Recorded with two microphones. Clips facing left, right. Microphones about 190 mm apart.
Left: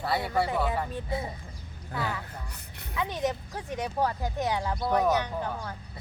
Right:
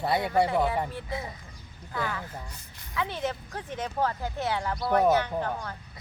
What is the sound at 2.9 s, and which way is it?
Speech, 15° left (ahead or behind).